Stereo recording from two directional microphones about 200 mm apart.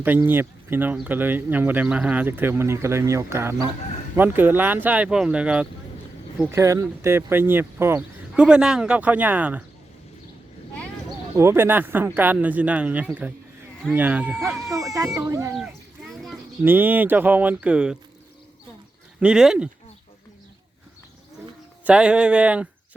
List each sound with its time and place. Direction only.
0.0 s speech: 10° right (ahead or behind)
11.3 s speech: 10° right (ahead or behind)
16.1 s a sound: centre (ahead or behind)
16.6 s speech: 10° right (ahead or behind)
19.2 s speech: 5° right (ahead or behind)
21.8 s speech: 5° right (ahead or behind)